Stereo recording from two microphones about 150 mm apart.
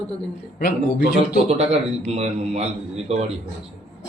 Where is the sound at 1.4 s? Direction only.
45° right (ahead or behind).